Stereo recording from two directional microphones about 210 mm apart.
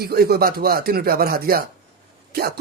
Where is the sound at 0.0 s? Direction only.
45° right (ahead or behind).